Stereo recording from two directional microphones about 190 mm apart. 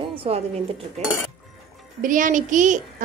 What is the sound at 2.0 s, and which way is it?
Music, 45° right (ahead or behind).